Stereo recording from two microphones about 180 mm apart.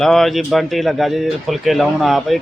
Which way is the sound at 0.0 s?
Centre (ahead or behind).